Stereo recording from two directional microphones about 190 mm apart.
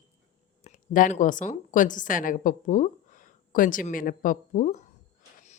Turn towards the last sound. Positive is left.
turn(degrees=40)  # may be behind; listen again after turning